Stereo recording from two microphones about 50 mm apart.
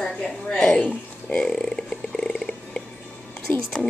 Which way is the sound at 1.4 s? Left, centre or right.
Centre.